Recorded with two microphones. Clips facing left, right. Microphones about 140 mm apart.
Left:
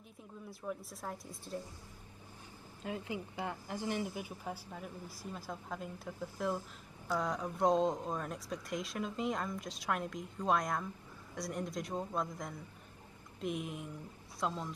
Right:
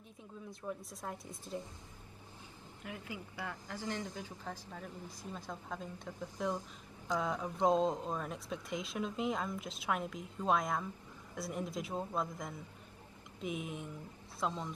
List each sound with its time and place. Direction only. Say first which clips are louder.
0.5 s a woman's voice: left 1 dB; centre (ahead or behind)
2.8 s a woman's voice: left 6 dB; 25° left (ahead or behind); by 6.6 s 10° left (ahead or behind)
7.2 s a woman's voice: even; centre (ahead or behind)